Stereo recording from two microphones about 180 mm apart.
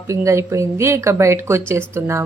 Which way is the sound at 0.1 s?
15° right (ahead or behind).